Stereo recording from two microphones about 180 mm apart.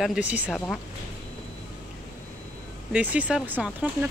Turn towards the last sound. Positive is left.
turn(degrees=-10)  # may be behind; listen again after turning